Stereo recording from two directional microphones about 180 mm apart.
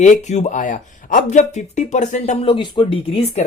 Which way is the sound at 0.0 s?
40° left (ahead or behind).